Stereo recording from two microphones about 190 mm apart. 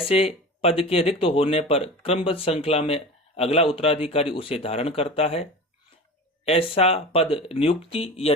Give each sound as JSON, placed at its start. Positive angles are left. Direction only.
{"t": 0.6, "sound": "speech", "side_deg": 30}